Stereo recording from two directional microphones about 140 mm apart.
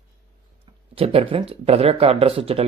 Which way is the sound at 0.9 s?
45° right (ahead or behind).